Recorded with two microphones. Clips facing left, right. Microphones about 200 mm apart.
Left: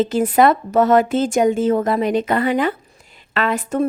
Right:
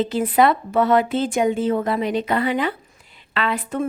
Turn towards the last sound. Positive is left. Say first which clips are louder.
# left 4 dB
turn(degrees=45)  # may be behind; listen again after turning